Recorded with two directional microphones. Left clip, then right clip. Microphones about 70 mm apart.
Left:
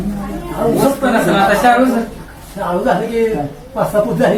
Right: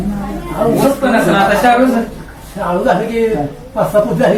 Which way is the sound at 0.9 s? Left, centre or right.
Centre.